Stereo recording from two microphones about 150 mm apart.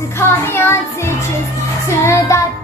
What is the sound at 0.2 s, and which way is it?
Music, 15° left (ahead or behind).